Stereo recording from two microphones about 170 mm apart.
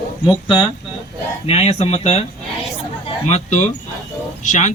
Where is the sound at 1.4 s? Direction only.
35° left (ahead or behind).